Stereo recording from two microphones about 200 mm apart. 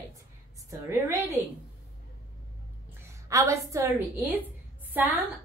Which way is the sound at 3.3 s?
15° right (ahead or behind).